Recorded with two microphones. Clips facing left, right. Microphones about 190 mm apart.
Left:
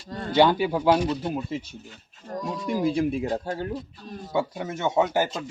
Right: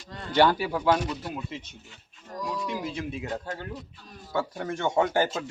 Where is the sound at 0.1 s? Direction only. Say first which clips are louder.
Left 6 dB; 40° left (ahead or behind).